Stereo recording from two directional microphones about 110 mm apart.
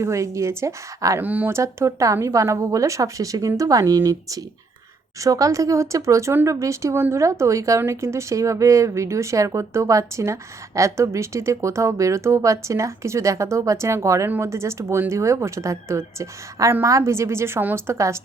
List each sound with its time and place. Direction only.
0.0 s speech: 25° right (ahead or behind)
1.2 s speech: 15° right (ahead or behind)
1.5 s speech: 25° right (ahead or behind)